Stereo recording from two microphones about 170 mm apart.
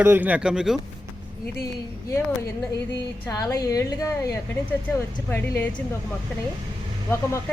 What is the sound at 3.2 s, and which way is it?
A woman's voice, 20° left (ahead or behind).